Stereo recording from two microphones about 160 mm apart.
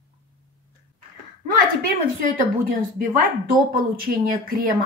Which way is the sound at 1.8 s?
60° right (ahead or behind).